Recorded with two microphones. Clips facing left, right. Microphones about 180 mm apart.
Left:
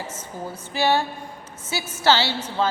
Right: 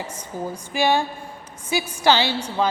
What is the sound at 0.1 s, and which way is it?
A woman's voice, 15° right (ahead or behind).